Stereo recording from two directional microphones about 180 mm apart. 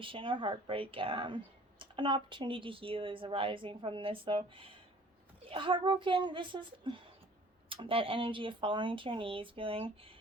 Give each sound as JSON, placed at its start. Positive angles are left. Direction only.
{"t": 0.0, "sound": "a woman's voice", "side_deg": -30}